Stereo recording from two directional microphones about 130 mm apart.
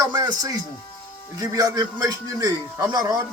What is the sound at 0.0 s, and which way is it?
A man's voice, 30° right (ahead or behind).